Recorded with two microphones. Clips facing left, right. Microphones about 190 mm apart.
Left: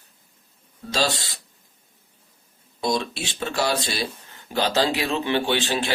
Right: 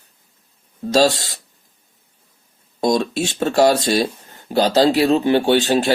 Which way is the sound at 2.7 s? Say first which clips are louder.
Right 7 dB; 45° right (ahead or behind).